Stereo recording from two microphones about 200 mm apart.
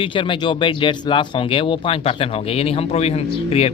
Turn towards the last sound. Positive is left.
turn(degrees=30)  # may be behind; listen again after turning